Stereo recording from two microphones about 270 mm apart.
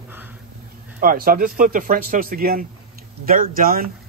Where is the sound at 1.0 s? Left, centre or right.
Right.